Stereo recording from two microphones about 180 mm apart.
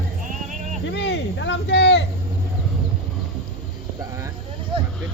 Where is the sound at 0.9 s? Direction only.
75° left (ahead or behind).